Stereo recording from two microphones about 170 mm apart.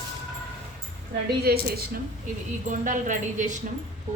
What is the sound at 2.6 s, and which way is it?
Speech, 50° right (ahead or behind).